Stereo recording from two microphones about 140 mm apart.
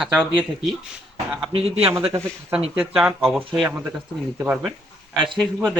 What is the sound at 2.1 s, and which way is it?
Speech, 20° right (ahead or behind).